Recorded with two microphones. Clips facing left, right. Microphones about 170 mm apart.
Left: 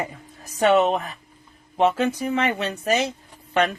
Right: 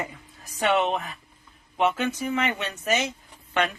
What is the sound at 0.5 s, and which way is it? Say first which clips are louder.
Speech: left 5 dB; 40° left (ahead or behind).